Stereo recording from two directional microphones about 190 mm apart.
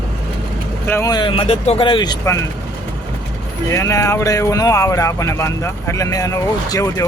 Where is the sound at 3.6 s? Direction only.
15° left (ahead or behind).